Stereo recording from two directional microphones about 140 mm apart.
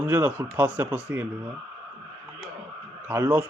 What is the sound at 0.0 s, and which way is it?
A man's voice, 15° right (ahead or behind).